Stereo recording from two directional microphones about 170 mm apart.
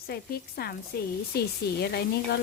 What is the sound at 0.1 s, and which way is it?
A woman's voice, 65° left (ahead or behind).